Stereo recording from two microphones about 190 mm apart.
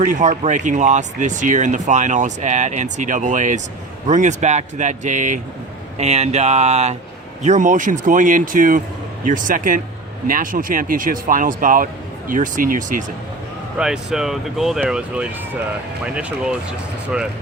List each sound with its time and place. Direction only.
0.0 s speech: 40° right (ahead or behind)
13.7 s speech: 5° right (ahead or behind)